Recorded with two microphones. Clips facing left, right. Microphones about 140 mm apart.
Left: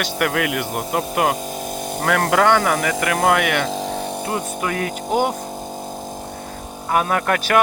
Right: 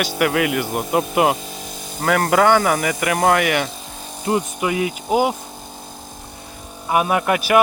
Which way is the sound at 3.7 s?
85° left.